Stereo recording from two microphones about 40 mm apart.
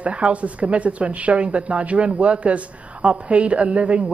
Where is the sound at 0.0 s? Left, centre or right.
Right.